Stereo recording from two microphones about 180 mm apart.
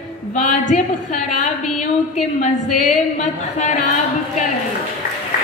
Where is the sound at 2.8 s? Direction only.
40° left (ahead or behind).